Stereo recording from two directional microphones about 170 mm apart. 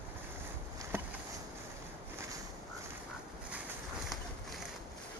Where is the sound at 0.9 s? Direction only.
15° right (ahead or behind).